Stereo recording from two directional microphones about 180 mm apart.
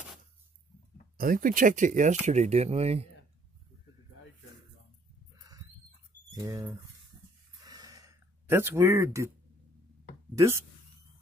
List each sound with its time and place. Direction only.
1.1 s speech: 50° right (ahead or behind); by 3.1 s 35° right (ahead or behind)
6.3 s speech: 15° right (ahead or behind)
7.6 s gasp: 20° right (ahead or behind)
10.3 s speech: 15° right (ahead or behind)